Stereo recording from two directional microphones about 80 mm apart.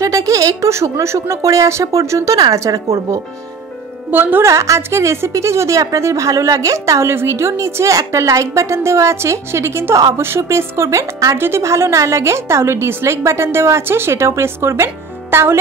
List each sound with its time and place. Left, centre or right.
0.0 s a sound: right
0.7 s a woman's voice: right
4.1 s speech: right
4.5 s a woman's voice: right
11.3 s a woman's voice: right